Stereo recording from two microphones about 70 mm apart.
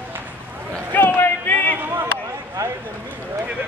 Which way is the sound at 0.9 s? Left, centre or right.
Left.